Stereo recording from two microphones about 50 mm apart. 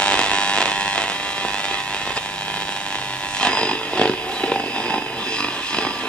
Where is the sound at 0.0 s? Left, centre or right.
Centre.